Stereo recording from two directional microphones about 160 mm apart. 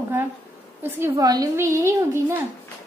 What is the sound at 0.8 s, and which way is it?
A woman's voice, 15° right (ahead or behind).